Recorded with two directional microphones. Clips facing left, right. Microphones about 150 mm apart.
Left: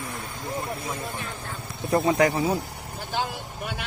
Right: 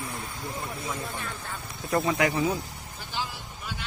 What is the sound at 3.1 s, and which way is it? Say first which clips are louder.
Vehicle: left 5 dB; 55° left (ahead or behind).